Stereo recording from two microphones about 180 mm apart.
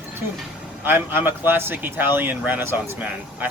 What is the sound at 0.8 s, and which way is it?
Speech, 10° right (ahead or behind).